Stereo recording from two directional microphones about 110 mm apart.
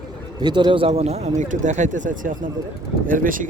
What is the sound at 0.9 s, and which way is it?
Speech, 75° right (ahead or behind).